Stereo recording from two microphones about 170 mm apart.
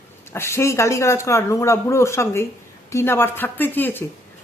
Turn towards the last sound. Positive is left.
turn(degrees=10)  # may be behind; listen again after turning